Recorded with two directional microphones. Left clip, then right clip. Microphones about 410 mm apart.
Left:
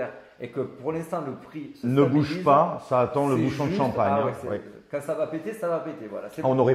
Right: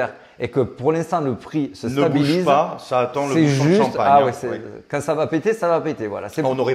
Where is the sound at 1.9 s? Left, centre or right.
Centre.